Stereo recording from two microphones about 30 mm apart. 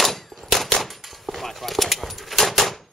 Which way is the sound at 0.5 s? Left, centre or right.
Centre.